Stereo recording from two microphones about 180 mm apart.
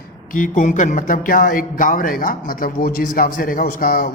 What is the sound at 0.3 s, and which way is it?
Speech, 45° left (ahead or behind).